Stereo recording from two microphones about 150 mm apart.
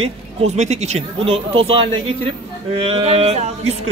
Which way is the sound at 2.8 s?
40° right (ahead or behind).